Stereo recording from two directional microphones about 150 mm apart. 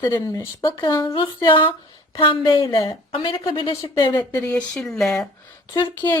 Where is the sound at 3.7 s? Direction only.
20° left (ahead or behind).